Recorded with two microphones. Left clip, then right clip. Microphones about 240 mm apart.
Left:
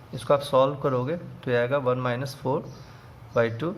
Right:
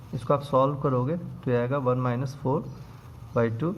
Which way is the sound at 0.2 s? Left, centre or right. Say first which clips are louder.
Left 2 dB; centre.